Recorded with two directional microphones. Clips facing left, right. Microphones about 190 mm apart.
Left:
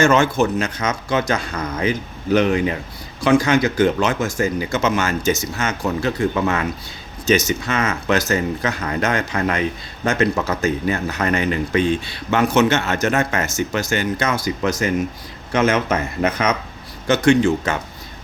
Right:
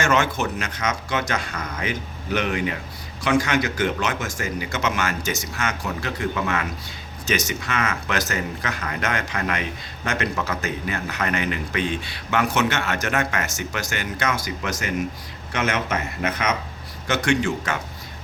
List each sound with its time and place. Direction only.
0.0 s a man's voice: 30° left (ahead or behind)